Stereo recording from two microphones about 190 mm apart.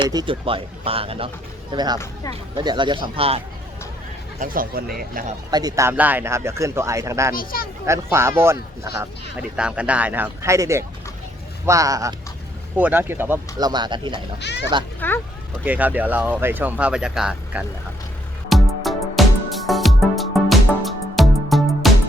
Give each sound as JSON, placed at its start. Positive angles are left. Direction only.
{"t": 0.0, "sound": "speech", "side_deg": -20}
{"t": 4.4, "sound": "speech", "side_deg": -50}
{"t": 5.5, "sound": "speech", "side_deg": -20}
{"t": 7.3, "sound": "speech", "side_deg": 50}
{"t": 7.9, "sound": "speech", "side_deg": -15}
{"t": 14.4, "sound": "a child's voice", "side_deg": 65}
{"t": 15.0, "sound": "speech", "side_deg": 10}
{"t": 15.6, "sound": "speech", "side_deg": -10}
{"t": 18.4, "sound": "music", "side_deg": 0}